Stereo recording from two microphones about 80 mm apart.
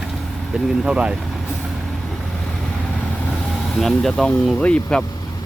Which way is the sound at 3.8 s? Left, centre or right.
Centre.